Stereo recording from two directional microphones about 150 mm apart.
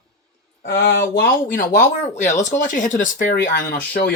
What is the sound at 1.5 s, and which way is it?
Speech, 55° left (ahead or behind).